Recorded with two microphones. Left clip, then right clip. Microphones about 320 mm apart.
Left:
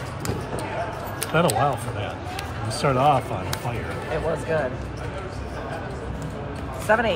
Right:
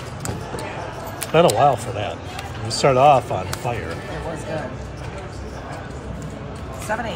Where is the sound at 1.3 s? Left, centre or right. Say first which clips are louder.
Right 6 dB; right.